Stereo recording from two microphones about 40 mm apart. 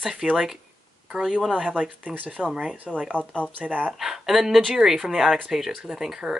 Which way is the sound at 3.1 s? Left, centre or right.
Left.